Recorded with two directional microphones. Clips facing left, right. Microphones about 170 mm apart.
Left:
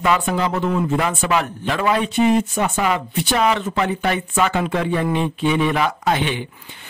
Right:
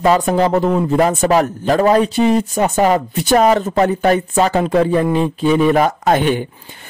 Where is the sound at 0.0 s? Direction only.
40° right (ahead or behind).